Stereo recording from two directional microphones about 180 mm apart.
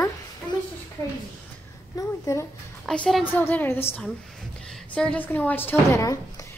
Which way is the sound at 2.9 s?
Centre (ahead or behind).